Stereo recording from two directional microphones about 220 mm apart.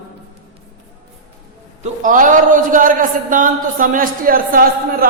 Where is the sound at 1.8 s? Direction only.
35° right (ahead or behind).